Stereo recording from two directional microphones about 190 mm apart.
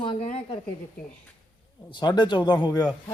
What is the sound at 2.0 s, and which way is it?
Speech, 25° left (ahead or behind).